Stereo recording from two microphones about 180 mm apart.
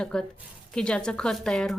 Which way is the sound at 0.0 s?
5° left (ahead or behind).